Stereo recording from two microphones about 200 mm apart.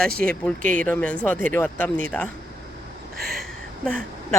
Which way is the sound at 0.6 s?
40° right (ahead or behind).